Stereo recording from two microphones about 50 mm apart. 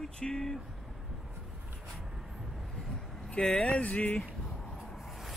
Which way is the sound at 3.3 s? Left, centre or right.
Centre.